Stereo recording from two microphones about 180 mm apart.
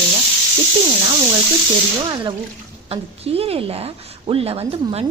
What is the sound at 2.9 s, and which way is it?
Speech, 35° right (ahead or behind).